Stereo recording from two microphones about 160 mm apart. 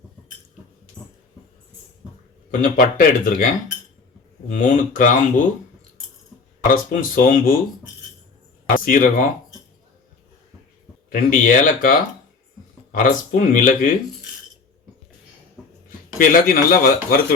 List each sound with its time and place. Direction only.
1.0 s a sound: 15° right (ahead or behind)
2.5 s speech: 55° left (ahead or behind)
4.5 s speech: 55° left (ahead or behind)
6.7 s speech: 55° left (ahead or behind)
8.7 s speech: 55° left (ahead or behind)
11.1 s speech: 55° left (ahead or behind)
16.1 s speech: 60° left (ahead or behind)